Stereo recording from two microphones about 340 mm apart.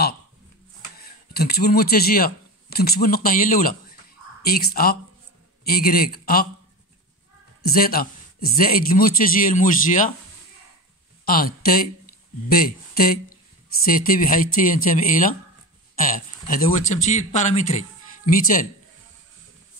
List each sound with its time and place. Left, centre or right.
0.9 s speech: left
7.6 s speech: left
11.2 s speech: left